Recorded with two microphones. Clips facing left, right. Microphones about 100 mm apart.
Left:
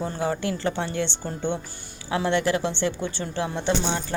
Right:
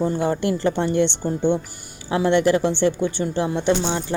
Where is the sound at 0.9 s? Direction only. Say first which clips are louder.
Right 8 dB; 15° right (ahead or behind).